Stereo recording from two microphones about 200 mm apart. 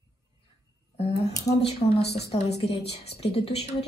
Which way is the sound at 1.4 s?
30° left (ahead or behind).